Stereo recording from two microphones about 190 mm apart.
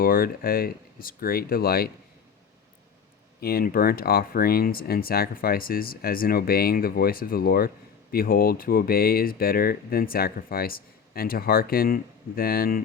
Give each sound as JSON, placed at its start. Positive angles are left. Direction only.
{"t": 0.0, "sound": "speech", "side_deg": 50}
{"t": 3.4, "sound": "speech", "side_deg": 50}